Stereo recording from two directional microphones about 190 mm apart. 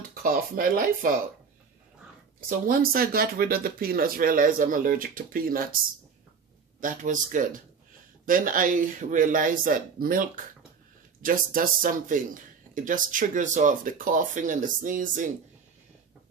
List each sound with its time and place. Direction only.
0.1 s speech: 45° right (ahead or behind)
2.7 s speech: 50° right (ahead or behind)
6.8 s speech: 45° right (ahead or behind)